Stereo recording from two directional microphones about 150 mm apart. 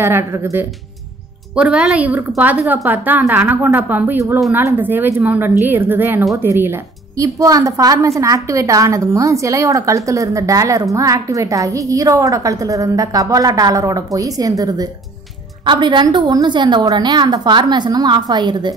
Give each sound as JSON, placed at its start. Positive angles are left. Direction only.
{"t": 0.0, "sound": "a woman's voice", "side_deg": -20}